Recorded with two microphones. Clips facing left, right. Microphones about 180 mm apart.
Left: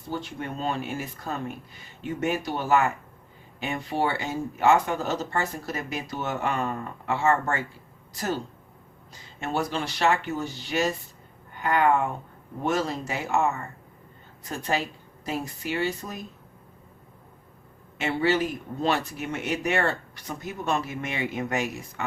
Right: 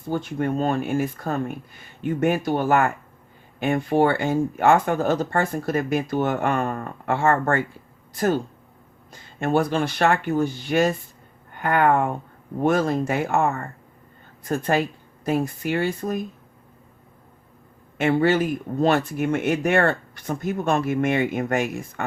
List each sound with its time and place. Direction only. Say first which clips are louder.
0.1 s speech: right 8 dB; 50° right (ahead or behind)
17.9 s speech: right 5 dB; 50° right (ahead or behind)